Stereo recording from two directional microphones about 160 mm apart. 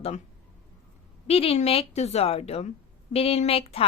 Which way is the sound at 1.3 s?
40° left (ahead or behind).